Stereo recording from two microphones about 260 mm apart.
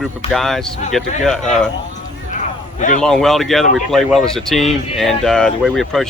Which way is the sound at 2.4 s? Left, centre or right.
Left.